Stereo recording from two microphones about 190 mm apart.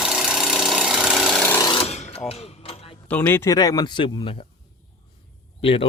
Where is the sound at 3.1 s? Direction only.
10° left (ahead or behind); by 4.4 s 25° left (ahead or behind).